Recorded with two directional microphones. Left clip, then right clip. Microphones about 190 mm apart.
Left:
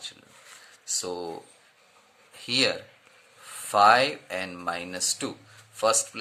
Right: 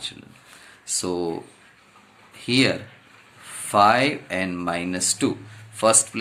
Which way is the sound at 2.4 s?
35° left (ahead or behind).